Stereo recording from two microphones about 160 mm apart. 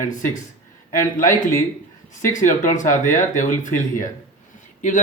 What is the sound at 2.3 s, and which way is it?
Speech, 50° left (ahead or behind).